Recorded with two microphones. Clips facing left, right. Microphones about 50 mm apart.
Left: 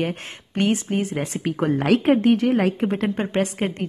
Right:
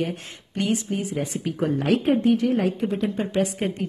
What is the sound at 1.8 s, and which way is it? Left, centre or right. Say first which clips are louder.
Speech: left 3 dB; left.